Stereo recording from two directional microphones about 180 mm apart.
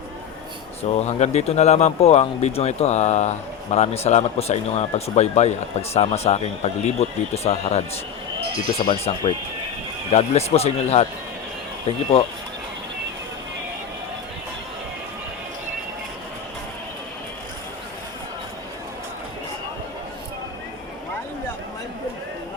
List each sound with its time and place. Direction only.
0.8 s speech: 35° left (ahead or behind)
8.8 s speech: 30° left (ahead or behind)